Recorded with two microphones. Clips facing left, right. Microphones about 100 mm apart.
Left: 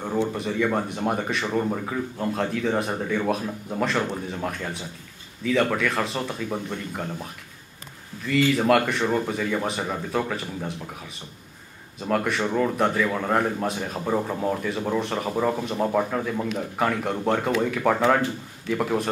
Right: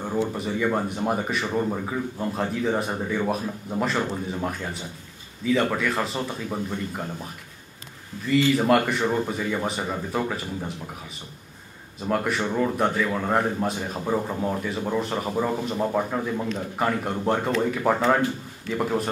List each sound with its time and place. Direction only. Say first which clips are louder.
0.3 s speech: left 1 dB; 5° right (ahead or behind)
8.3 s speech: even; 5° right (ahead or behind)
12.0 s speech: left 1 dB; centre (ahead or behind)
16.3 s speech: left 1 dB; 5° left (ahead or behind)